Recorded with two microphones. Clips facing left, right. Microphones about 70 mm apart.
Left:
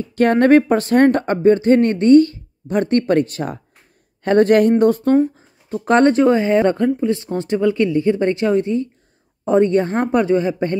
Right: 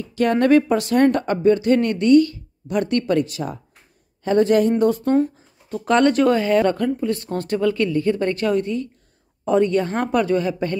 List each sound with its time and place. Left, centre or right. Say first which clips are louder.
0.0 s speech: left 4 dB; left
5.1 s speech: left 3 dB; left